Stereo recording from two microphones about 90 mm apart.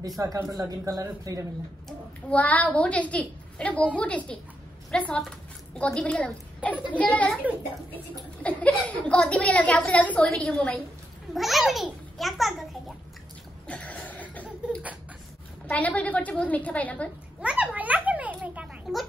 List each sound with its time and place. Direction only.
0.2 s speech: 40° right (ahead or behind)
2.2 s a woman's voice: 15° left (ahead or behind)
11.3 s a child's voice: centre (ahead or behind)
13.7 s a sound: 15° left (ahead or behind)
15.7 s a woman's voice: 15° left (ahead or behind)
17.4 s a sound: 10° right (ahead or behind)
18.9 s a child's voice: centre (ahead or behind)